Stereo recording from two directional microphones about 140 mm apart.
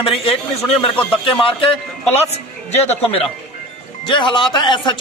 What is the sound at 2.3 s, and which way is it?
Speech, 50° left (ahead or behind).